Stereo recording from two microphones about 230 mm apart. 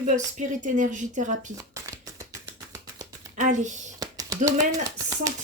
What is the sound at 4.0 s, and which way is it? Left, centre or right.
Typing, centre.